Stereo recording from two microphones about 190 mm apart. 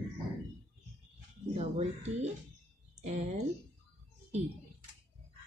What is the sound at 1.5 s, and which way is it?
Speech, 35° right (ahead or behind).